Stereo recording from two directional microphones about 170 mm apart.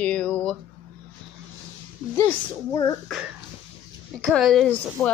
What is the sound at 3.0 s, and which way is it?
A woman's voice, centre (ahead or behind).